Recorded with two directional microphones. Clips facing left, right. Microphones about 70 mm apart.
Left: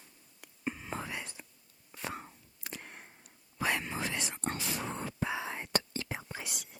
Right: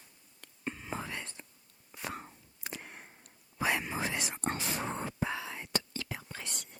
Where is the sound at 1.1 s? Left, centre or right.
Centre.